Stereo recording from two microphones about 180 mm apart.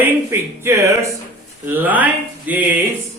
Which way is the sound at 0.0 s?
15° right (ahead or behind).